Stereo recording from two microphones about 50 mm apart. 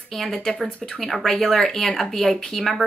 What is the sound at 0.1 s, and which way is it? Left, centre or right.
A woman's voice, centre.